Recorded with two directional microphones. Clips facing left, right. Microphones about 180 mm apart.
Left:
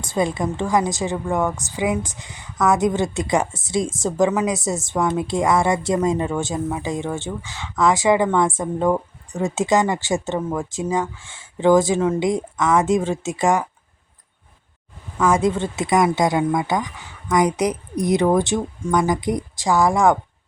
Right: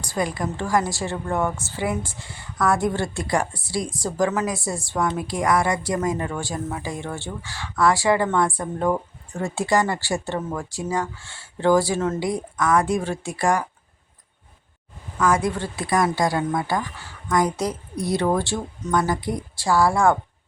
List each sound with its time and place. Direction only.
0.0 s a woman's voice: 25° left (ahead or behind)
15.2 s a woman's voice: 20° left (ahead or behind)